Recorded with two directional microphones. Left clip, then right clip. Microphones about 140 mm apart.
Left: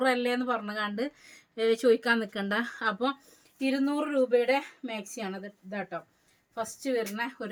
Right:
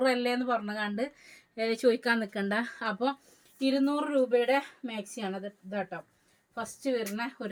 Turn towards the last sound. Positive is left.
turn(degrees=35)  # may be behind; listen again after turning